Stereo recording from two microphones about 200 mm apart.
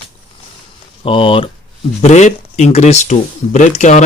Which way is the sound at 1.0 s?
25° left (ahead or behind).